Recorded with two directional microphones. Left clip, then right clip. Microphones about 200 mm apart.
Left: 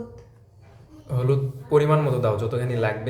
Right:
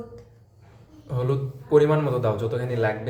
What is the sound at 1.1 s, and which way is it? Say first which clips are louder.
A man's voice: left 2 dB; 10° left (ahead or behind).